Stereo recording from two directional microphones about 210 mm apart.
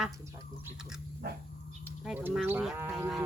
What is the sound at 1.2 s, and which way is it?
Dog, 50° right (ahead or behind).